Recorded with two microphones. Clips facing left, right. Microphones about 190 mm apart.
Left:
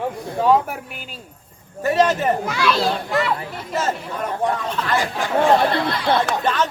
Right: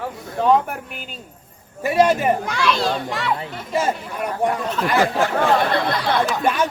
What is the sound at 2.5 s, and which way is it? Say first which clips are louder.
Speech: left 1 dB; centre (ahead or behind).